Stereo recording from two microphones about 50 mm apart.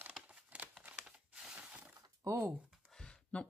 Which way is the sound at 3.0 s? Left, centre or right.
Left.